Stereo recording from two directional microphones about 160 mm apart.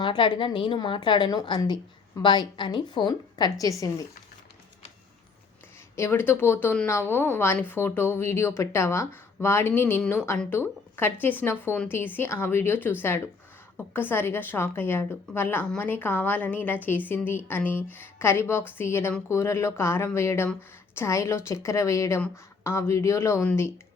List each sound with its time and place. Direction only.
0.0 s a woman's voice: 30° left (ahead or behind)
6.0 s a woman's voice: 15° left (ahead or behind)